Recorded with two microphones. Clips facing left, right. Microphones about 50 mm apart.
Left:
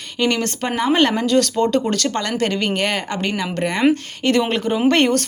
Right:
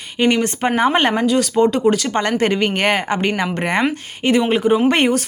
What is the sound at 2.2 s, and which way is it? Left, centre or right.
A woman's voice, right.